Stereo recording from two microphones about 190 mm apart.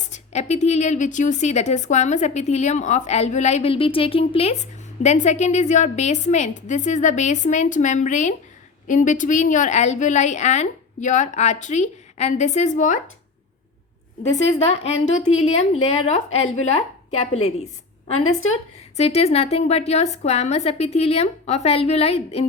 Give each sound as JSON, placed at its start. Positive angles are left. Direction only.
{"t": 0.1, "sound": "a woman's voice", "side_deg": 35}
{"t": 14.3, "sound": "a woman's voice", "side_deg": 35}